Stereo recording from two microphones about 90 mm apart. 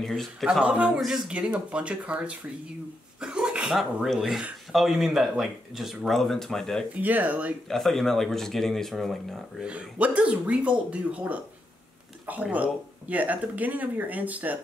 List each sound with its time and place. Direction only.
0.0 s speech: centre (ahead or behind)
0.5 s speech: 10° right (ahead or behind); by 6.8 s 5° left (ahead or behind)
7.0 s speech: 15° right (ahead or behind)
7.6 s speech: 5° left (ahead or behind)
9.6 s speech: 15° right (ahead or behind)